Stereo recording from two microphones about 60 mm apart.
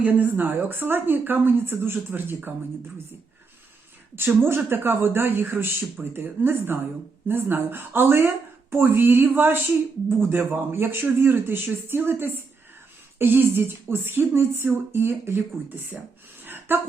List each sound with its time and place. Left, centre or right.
0.0 s a woman's voice: right
4.1 s a woman's voice: right
16.4 s gasp: right